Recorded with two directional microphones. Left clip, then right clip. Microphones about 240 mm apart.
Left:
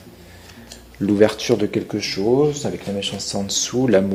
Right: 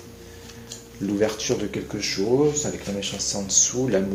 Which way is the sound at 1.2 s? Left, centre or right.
Left.